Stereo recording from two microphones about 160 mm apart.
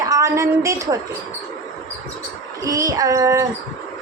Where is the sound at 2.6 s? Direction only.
20° right (ahead or behind).